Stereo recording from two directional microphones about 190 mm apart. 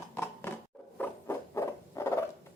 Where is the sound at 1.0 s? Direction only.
15° left (ahead or behind).